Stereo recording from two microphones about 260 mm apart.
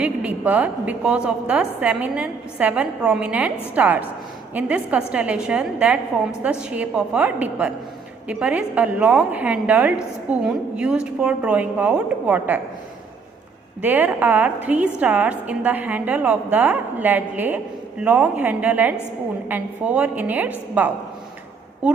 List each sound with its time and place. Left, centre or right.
0.0 s a woman's voice: centre
13.8 s a woman's voice: centre